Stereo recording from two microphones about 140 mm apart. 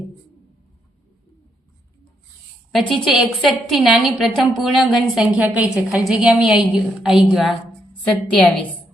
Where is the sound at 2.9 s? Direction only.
Centre (ahead or behind).